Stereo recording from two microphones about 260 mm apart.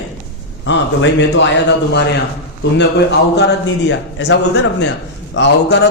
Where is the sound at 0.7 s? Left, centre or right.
Left.